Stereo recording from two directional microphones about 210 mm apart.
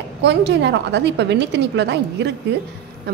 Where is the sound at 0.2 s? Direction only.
55° right (ahead or behind).